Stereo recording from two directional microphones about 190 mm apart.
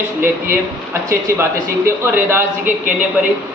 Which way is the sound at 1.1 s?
15° right (ahead or behind).